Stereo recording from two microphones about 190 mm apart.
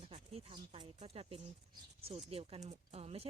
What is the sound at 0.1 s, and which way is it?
Speech, 30° right (ahead or behind).